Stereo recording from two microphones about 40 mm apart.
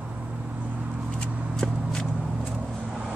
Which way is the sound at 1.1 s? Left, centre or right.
Centre.